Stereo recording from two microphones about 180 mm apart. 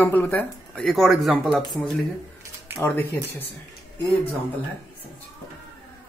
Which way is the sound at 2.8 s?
10° left (ahead or behind).